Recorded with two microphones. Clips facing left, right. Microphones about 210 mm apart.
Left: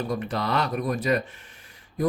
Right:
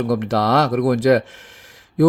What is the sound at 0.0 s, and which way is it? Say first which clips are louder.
A man's voice: right 9 dB; 80° right.